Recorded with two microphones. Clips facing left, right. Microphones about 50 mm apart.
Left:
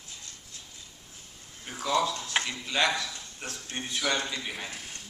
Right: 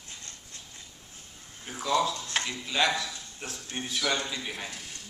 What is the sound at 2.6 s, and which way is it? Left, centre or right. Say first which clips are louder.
A man's voice: right 2 dB; centre.